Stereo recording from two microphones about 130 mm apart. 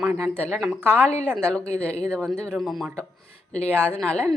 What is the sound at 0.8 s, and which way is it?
Speech, 15° right (ahead or behind).